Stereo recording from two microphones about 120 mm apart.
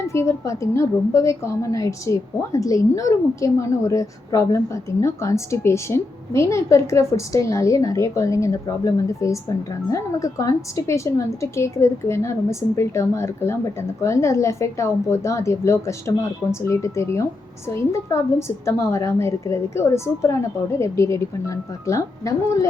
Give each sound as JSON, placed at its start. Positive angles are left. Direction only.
{"t": 0.0, "sound": "a woman's voice", "side_deg": 25}